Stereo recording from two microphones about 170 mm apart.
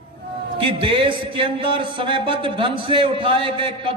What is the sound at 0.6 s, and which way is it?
A man's voice, 30° right (ahead or behind).